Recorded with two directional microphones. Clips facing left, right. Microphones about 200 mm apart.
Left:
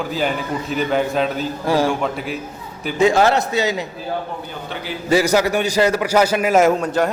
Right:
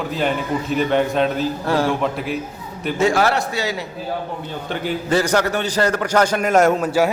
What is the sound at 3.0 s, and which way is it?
Speech, 20° left (ahead or behind).